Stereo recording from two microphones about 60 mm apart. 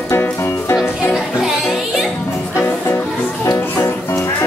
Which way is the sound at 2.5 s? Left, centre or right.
Left.